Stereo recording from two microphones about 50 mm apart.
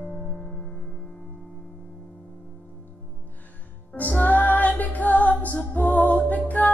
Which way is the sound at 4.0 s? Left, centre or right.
Left.